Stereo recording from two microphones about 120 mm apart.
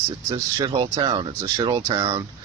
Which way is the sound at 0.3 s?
40° right (ahead or behind).